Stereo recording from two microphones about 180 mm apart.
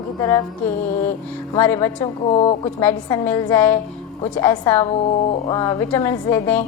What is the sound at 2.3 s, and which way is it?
Speech, 35° left (ahead or behind).